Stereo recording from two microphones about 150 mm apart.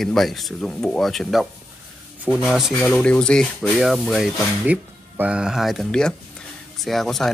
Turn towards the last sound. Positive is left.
turn(degrees=0)  # may be behind; listen again after turning